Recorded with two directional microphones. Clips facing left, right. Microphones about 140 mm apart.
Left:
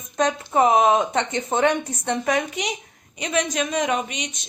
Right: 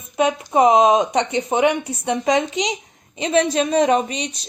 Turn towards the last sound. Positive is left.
turn(degrees=-35)  # may be behind; listen again after turning